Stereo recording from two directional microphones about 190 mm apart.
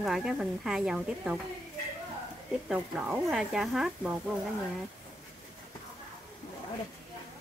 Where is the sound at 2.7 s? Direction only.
5° right (ahead or behind).